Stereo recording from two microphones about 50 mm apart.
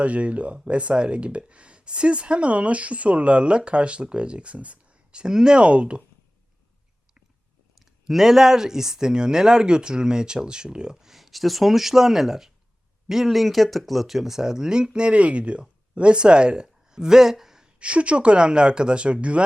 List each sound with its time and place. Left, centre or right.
0.0 s speech: right
7.8 s speech: centre
17.7 s speech: right